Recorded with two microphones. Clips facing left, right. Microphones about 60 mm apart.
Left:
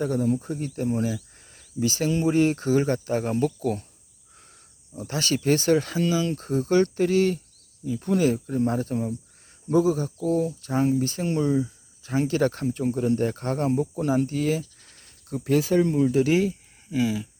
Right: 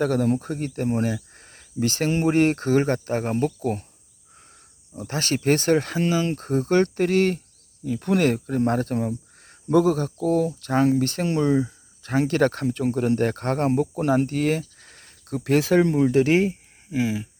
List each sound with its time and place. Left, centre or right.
0.0 s speech: right
4.9 s speech: right
7.9 s speech: right
16.9 s speech: right